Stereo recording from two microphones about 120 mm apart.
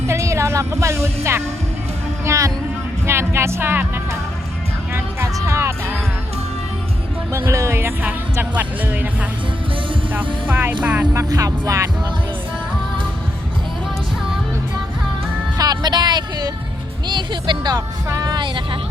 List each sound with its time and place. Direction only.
0.1 s music: 25° right (ahead or behind)
2.2 s speech: 25° right (ahead or behind)
7.3 s speech: 25° right (ahead or behind)
10.5 s speech: 15° right (ahead or behind)
11.1 s speech: 25° right (ahead or behind)
15.5 s music: 35° right (ahead or behind)
17.1 s speech: 40° right (ahead or behind)